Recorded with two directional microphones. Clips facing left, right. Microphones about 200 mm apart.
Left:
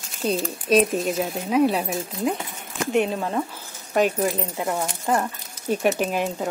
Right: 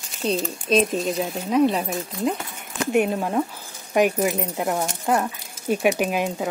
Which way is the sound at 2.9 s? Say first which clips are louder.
Right 1 dB; 10° right (ahead or behind).